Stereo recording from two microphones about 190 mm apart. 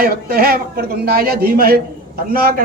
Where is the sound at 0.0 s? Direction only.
50° right (ahead or behind).